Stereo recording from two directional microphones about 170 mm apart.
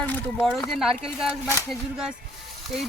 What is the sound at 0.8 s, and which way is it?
Speech, centre (ahead or behind).